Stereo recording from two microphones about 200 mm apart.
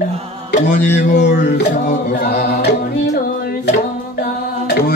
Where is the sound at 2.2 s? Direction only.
50° left (ahead or behind).